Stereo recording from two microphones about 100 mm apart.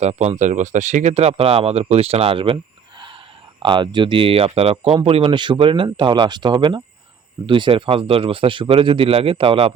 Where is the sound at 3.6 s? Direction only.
55° right (ahead or behind); by 5.3 s 80° right.